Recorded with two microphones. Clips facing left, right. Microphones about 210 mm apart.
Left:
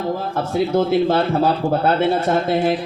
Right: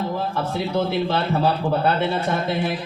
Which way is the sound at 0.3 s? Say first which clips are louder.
Left 7 dB; 50° left (ahead or behind).